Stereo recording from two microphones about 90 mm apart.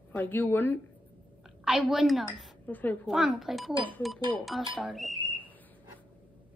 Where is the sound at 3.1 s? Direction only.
5° right (ahead or behind).